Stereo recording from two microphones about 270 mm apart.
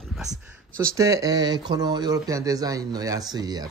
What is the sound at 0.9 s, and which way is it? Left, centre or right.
Speech, centre.